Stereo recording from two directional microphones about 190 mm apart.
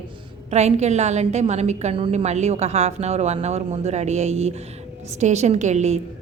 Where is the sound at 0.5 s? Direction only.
35° right (ahead or behind).